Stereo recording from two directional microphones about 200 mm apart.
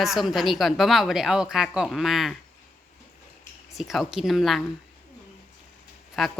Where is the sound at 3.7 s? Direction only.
Centre (ahead or behind).